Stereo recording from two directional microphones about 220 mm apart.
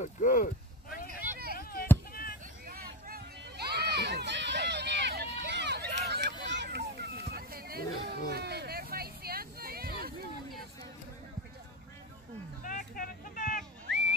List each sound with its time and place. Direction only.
0.0 s speech: 35° left (ahead or behind)
1.5 s chop: 45° left (ahead or behind)
2.6 s a sound: 45° right (ahead or behind)
12.6 s vehicle: 40° left (ahead or behind)
13.8 s whistling: 55° right (ahead or behind)